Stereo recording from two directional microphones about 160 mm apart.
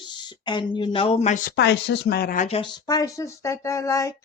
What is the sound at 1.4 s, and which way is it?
Speech, 90° left.